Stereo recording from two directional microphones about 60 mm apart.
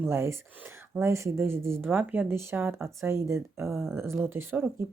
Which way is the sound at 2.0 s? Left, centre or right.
Right.